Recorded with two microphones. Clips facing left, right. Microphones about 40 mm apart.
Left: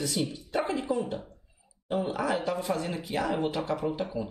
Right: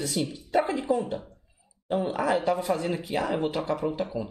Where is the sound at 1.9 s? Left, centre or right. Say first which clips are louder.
Right 2 dB; right.